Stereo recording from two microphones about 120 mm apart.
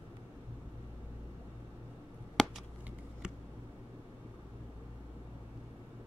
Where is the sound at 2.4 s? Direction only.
Centre (ahead or behind).